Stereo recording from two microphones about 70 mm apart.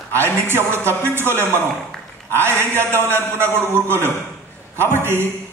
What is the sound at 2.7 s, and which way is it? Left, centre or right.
Speech, left.